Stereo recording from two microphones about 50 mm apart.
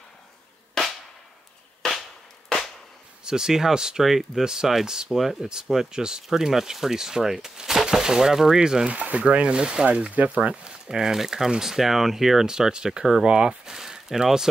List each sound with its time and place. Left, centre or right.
1.8 s firecracker: centre
3.3 s speech: centre
8.9 s speech: right
10.6 s speech: centre